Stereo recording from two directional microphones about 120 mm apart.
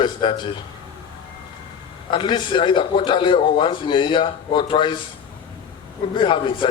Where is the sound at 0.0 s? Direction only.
45° left (ahead or behind).